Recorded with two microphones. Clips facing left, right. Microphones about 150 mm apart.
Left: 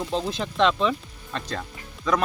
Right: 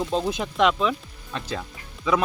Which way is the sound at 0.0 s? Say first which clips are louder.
Right 2 dB; 10° right (ahead or behind).